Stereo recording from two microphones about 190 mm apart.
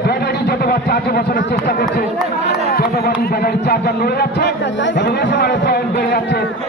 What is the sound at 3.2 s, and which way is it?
Speech, 55° left (ahead or behind).